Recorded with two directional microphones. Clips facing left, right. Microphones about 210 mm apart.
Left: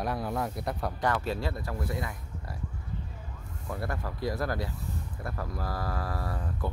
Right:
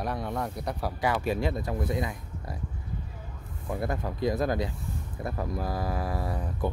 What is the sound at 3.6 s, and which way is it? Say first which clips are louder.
Speech: right 4 dB; 20° right (ahead or behind).